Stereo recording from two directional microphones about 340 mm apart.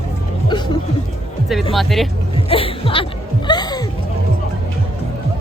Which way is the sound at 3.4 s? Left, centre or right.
Centre.